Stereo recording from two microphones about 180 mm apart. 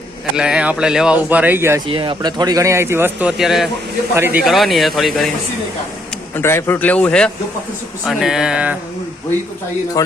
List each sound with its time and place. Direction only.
0.3 s speech: 5° right (ahead or behind)
1.9 s speech: 30° right (ahead or behind); by 3.7 s centre (ahead or behind)
4.1 s speech: 10° right (ahead or behind)
4.4 s speech: centre (ahead or behind)
6.3 s a man's voice: 15° left (ahead or behind); by 8.8 s 5° right (ahead or behind)